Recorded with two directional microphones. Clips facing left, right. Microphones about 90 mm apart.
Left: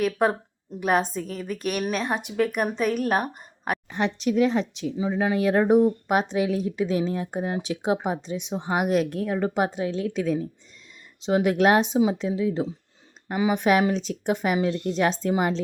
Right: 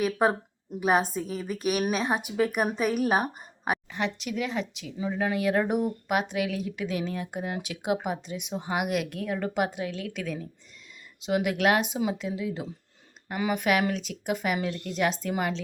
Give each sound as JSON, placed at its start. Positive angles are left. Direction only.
{"t": 0.0, "sound": "speech", "side_deg": -5}
{"t": 3.8, "sound": "speech", "side_deg": 30}
{"t": 4.9, "sound": "speech", "side_deg": 15}
{"t": 13.9, "sound": "speech", "side_deg": 30}